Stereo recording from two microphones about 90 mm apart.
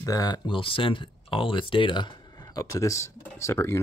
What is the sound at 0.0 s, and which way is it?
Speech, 45° left (ahead or behind).